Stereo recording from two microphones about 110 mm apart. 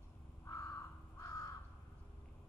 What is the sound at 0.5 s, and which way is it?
Crow, 30° left (ahead or behind).